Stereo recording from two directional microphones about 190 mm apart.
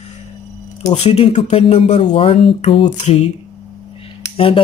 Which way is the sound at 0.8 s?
35° left (ahead or behind).